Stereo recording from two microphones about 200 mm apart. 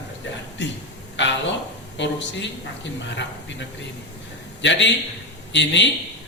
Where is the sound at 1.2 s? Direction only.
60° left (ahead or behind).